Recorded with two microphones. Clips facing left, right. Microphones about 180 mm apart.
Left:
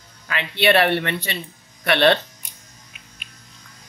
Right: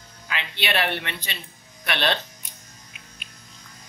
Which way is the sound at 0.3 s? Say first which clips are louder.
Left 9 dB; 60° left (ahead or behind).